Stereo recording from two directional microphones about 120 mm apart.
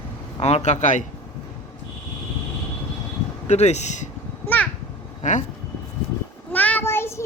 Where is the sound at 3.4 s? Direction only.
65° left (ahead or behind).